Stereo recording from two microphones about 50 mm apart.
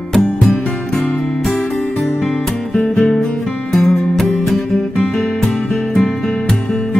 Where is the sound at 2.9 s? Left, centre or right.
Centre.